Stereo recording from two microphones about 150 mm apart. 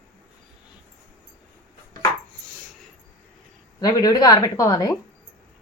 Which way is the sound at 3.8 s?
25° left (ahead or behind).